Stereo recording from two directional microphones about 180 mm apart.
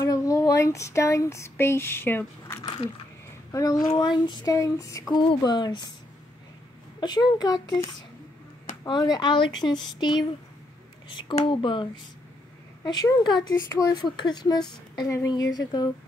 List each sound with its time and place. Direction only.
0.0 s speech: 20° left (ahead or behind)
7.0 s speech: 25° left (ahead or behind)